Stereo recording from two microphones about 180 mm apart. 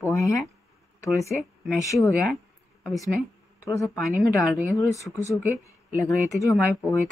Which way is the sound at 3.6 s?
15° left (ahead or behind).